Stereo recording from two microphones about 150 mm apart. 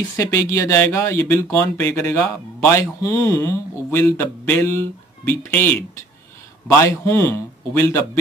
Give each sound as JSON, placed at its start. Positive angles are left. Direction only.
{"t": 0.2, "sound": "speech", "side_deg": 20}